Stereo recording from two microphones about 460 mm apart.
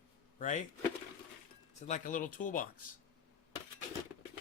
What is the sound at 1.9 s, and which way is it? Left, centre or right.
Speech, centre.